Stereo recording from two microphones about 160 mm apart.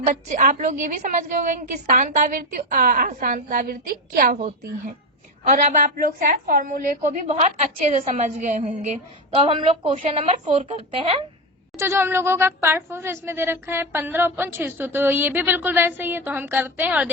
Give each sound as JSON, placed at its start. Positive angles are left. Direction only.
{"t": 0.0, "sound": "a woman's voice", "side_deg": -50}
{"t": 5.5, "sound": "a woman's voice", "side_deg": -60}
{"t": 9.4, "sound": "a woman's voice", "side_deg": -35}
{"t": 11.8, "sound": "speech", "side_deg": -15}